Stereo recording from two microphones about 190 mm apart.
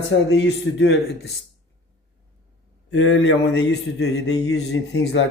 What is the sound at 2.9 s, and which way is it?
A man's voice, 75° left (ahead or behind).